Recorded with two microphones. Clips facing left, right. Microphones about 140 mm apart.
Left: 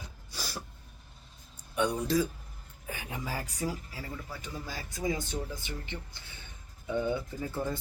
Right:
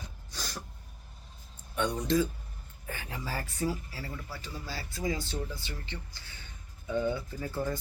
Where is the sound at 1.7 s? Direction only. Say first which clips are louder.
Even; 10° left (ahead or behind).